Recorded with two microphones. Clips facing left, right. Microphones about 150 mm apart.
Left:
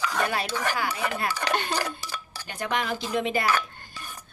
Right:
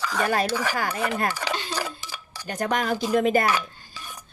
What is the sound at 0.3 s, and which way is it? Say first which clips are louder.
Speech: right 6 dB; 45° right (ahead or behind).